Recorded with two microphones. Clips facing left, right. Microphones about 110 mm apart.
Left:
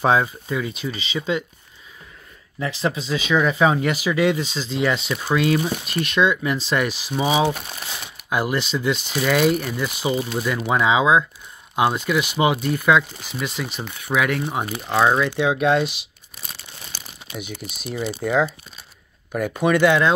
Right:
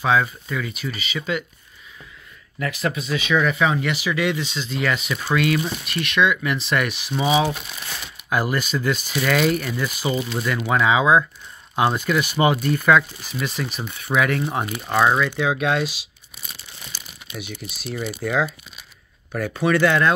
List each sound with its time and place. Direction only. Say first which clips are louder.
0.0 s speech: left 1 dB; 25° left (ahead or behind)
2.6 s speech: left 1 dB; 25° left (ahead or behind)
5.1 s speech: left 1 dB; 15° left (ahead or behind)
5.9 s speech: even; 35° left (ahead or behind)
8.5 s speech: left 1 dB; 20° left (ahead or behind); by 15.8 s 5° left (ahead or behind)
16.9 s speech: left 2 dB; 15° left (ahead or behind)
19.3 s speech: left 1 dB; 10° left (ahead or behind)